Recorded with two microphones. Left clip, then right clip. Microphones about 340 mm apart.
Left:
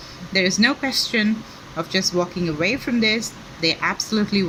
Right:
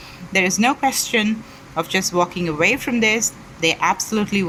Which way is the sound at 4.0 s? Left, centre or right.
Right.